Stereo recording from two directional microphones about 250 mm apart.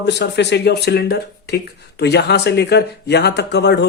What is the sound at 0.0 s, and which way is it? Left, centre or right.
A man's voice, left.